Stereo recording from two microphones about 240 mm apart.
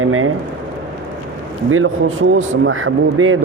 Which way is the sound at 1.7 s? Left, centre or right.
Right.